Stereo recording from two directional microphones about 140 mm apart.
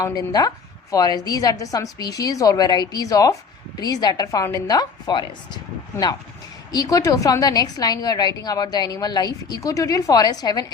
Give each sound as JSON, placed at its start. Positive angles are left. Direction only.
{"t": 0.0, "sound": "a woman's voice", "side_deg": 25}
{"t": 6.7, "sound": "a woman's voice", "side_deg": 25}